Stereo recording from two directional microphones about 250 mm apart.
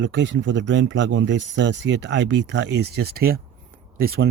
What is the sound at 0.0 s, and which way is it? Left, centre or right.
Speech, right.